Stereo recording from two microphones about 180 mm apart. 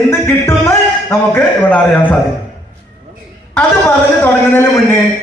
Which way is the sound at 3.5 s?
10° left (ahead or behind).